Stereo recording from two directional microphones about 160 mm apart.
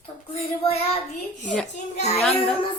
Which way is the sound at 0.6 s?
40° left (ahead or behind).